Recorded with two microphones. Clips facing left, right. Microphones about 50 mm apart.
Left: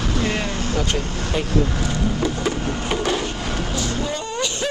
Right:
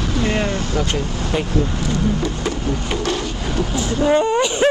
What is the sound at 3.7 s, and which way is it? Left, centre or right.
Speech, right.